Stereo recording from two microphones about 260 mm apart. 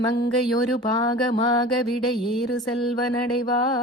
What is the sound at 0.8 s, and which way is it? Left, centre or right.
Mantra, centre.